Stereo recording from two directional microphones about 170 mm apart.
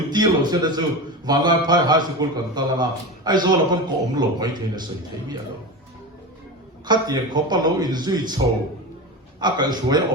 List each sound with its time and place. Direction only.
0.1 s a man's voice: 25° right (ahead or behind)
6.8 s a man's voice: 25° right (ahead or behind)
9.4 s a man's voice: 25° right (ahead or behind)